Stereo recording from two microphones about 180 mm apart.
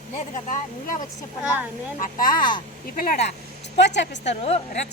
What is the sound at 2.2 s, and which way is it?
Speech, 50° left (ahead or behind).